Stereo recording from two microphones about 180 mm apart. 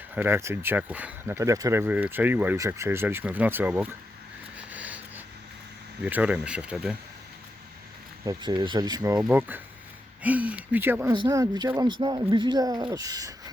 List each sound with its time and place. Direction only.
0.1 s speech: 10° right (ahead or behind)
4.5 s a sound: 10° right (ahead or behind)
6.0 s speech: 10° right (ahead or behind)
8.2 s speech: 20° right (ahead or behind)
9.1 s speech: 10° right (ahead or behind)